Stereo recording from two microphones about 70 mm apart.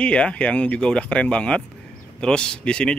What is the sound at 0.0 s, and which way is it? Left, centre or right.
Speech, centre.